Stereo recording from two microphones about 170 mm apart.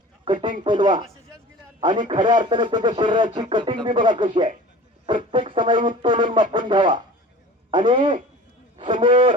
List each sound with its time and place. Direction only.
0.6 s speech: 30° right (ahead or behind)